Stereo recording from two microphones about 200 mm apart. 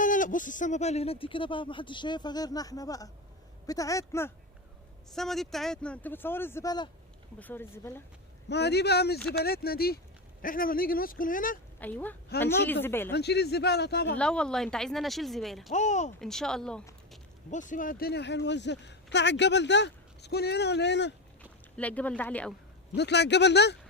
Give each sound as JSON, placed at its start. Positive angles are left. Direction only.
{"t": 0.0, "sound": "speech", "side_deg": 40}
{"t": 5.1, "sound": "speech", "side_deg": 0}
{"t": 7.3, "sound": "speech", "side_deg": 10}
{"t": 8.4, "sound": "speech", "side_deg": 55}
{"t": 9.1, "sound": "speech", "side_deg": 5}
{"t": 9.4, "sound": "speech", "side_deg": 50}
{"t": 11.8, "sound": "speech", "side_deg": 10}
{"t": 13.1, "sound": "speech", "side_deg": 55}
{"t": 14.2, "sound": "speech", "side_deg": 5}
{"t": 15.7, "sound": "speech", "side_deg": 35}
{"t": 16.2, "sound": "speech", "side_deg": 0}
{"t": 17.5, "sound": "speech", "side_deg": 40}
{"t": 21.8, "sound": "speech", "side_deg": 5}
{"t": 23.0, "sound": "speech", "side_deg": 60}